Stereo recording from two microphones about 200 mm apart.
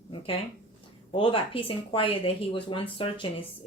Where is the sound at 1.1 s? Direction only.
25° left (ahead or behind).